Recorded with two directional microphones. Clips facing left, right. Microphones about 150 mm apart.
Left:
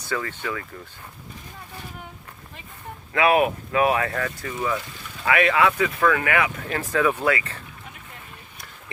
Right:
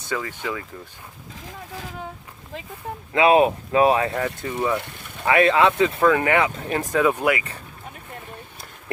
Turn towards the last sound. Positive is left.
turn(degrees=-15)  # may be behind; listen again after turning